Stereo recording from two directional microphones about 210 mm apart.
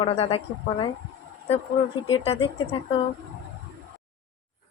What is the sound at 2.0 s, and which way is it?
Speech, 25° left (ahead or behind).